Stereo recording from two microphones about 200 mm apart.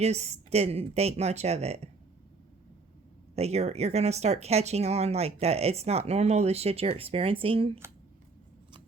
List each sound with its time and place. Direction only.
0.0 s speech: 35° right (ahead or behind)
3.3 s speech: 30° right (ahead or behind)